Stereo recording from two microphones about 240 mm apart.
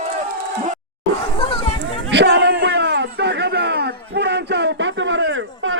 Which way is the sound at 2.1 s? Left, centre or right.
Right.